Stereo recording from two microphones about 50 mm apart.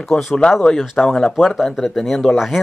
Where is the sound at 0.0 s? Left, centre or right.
Centre.